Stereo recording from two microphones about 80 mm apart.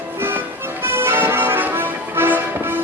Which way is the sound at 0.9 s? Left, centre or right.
Right.